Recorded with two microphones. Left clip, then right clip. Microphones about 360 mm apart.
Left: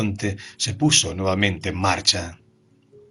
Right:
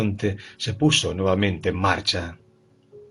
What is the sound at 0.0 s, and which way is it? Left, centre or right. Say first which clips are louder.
Speech: right 1 dB; centre.